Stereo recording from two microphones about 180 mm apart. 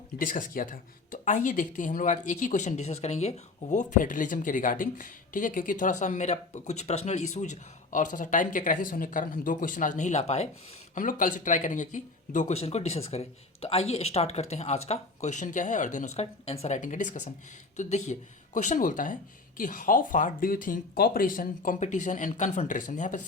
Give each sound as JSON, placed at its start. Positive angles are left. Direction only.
{"t": 0.2, "sound": "speech", "side_deg": 50}
{"t": 10.9, "sound": "speech", "side_deg": 50}